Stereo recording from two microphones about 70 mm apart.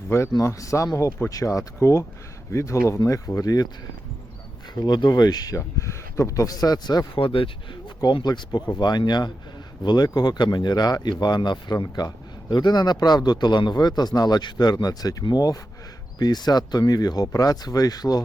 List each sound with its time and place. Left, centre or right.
0.4 s speech: left
4.7 s speech: left
5.5 s speech: left